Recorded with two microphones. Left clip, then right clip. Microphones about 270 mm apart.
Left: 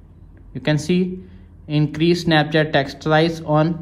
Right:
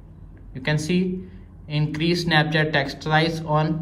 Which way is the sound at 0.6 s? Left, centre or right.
Left.